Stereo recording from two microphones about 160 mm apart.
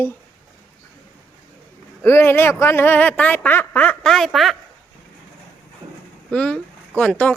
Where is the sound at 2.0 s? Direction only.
15° left (ahead or behind).